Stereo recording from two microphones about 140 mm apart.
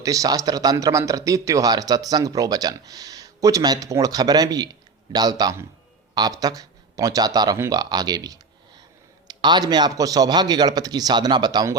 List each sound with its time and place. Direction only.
0.0 s speech: 25° right (ahead or behind)